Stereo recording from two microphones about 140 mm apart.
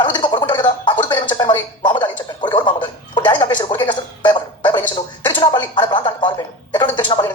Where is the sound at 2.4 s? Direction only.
35° left (ahead or behind).